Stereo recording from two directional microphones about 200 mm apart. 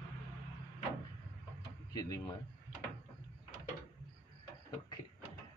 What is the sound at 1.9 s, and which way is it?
Speech, 20° left (ahead or behind).